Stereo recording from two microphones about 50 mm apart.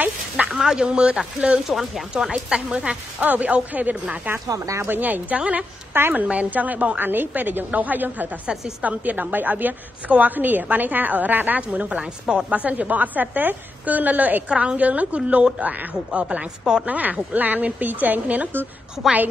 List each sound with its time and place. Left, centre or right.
0.5 s a woman's voice: centre
1.7 s a woman's voice: centre; by 4.2 s right
4.5 s speech: right
4.8 s a woman's voice: right
5.4 s a woman's voice: right
7.0 s a woman's voice: right
14.5 s a woman's voice: right
16.8 s a woman's voice: right